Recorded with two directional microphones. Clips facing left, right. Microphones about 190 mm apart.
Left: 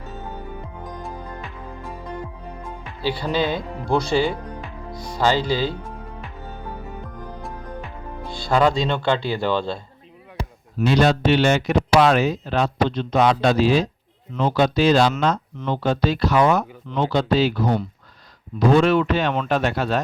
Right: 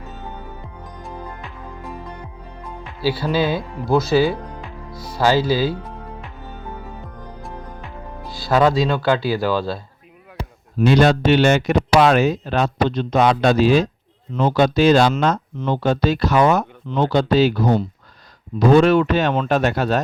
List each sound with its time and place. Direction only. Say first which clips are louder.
3.0 s speech: right 3 dB; 5° right (ahead or behind)
8.4 s speech: right 2 dB; 5° right (ahead or behind)
10.8 s speech: right 3 dB; 50° right (ahead or behind)
18.7 s speech: right 4 dB; 45° right (ahead or behind)